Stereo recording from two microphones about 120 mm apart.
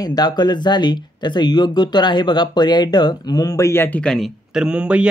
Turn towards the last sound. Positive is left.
turn(degrees=-10)  # may be behind; listen again after turning